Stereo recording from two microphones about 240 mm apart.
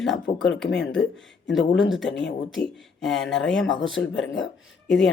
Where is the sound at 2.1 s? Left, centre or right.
Left.